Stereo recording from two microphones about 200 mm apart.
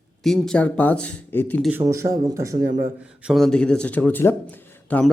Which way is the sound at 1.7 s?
15° right (ahead or behind).